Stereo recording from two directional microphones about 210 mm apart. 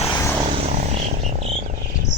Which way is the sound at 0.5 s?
30° right (ahead or behind).